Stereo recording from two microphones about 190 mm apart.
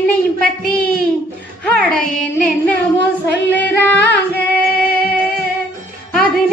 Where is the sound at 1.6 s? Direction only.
5° left (ahead or behind).